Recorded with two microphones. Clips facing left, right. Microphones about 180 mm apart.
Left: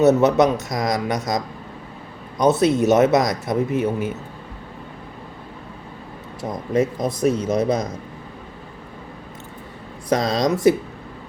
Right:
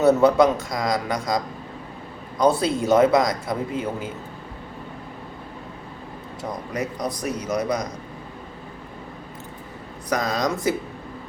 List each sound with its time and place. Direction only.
0.0 s speech: 20° left (ahead or behind)
2.4 s speech: 20° left (ahead or behind)
6.4 s speech: 25° left (ahead or behind)
10.1 s speech: 25° left (ahead or behind)